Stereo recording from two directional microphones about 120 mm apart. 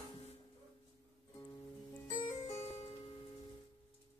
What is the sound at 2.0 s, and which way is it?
Music, 30° left (ahead or behind).